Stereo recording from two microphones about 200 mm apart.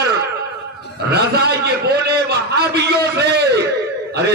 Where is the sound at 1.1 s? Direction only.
55° right (ahead or behind).